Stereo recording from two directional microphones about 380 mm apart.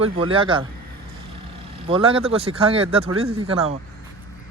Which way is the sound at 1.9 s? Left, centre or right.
Centre.